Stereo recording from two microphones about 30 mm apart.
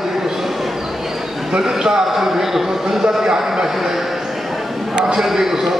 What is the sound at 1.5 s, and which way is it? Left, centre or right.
Speech, centre.